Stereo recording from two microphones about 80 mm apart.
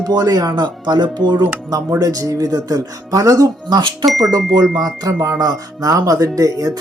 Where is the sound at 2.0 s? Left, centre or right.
Right.